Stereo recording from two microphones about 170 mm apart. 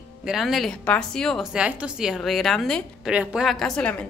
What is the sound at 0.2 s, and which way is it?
A woman's voice, centre (ahead or behind).